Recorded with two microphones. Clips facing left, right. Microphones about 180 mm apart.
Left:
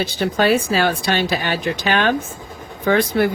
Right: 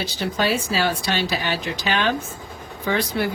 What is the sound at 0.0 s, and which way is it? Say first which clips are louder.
Speech: left 5 dB; 55° left (ahead or behind).